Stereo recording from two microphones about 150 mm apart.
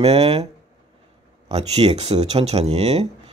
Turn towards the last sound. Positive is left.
turn(degrees=-45)  # may be behind; listen again after turning